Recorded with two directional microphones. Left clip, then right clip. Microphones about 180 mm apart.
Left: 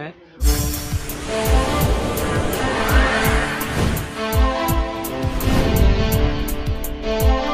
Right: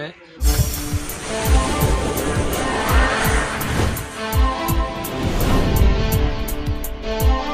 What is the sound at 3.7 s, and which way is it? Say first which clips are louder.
Music: left 1 dB; centre (ahead or behind).